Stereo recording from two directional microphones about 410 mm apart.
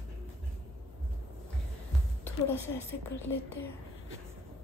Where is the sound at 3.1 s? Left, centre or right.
Left.